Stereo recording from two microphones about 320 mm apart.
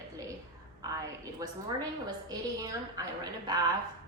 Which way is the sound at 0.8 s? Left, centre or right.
Centre.